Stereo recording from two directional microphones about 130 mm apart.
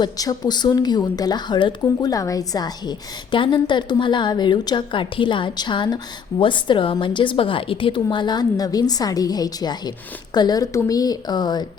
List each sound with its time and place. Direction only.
0.0 s a woman's voice: 30° left (ahead or behind)